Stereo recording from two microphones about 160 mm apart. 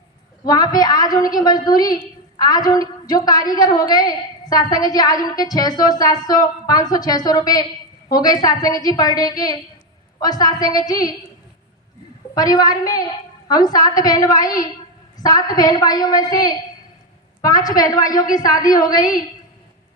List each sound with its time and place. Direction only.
0.4 s a woman's voice: 25° left (ahead or behind)
12.3 s a woman's voice: 25° left (ahead or behind)